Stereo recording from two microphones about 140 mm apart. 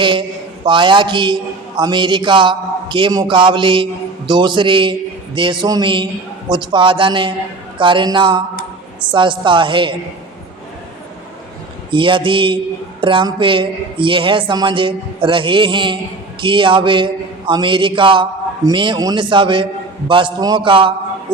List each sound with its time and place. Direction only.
0.0 s a man's voice: 35° right (ahead or behind)
11.9 s a man's voice: 35° right (ahead or behind)